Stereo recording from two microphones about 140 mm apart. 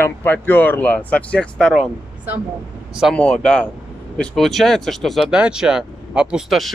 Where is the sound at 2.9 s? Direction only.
5° right (ahead or behind).